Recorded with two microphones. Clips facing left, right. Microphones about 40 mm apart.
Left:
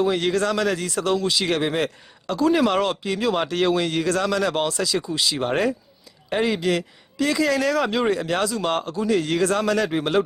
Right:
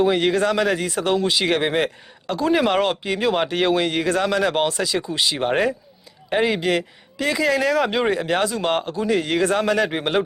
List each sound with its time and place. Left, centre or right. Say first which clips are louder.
0.0 s speech: right 3 dB; right